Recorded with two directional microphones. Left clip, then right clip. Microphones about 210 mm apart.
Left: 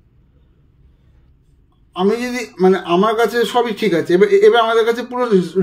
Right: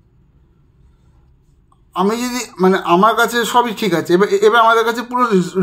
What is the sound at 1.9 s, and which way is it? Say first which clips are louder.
A man's voice: even; 30° right (ahead or behind).